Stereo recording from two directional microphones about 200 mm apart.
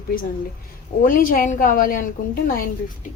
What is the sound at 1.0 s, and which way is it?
A woman's voice, 45° left (ahead or behind).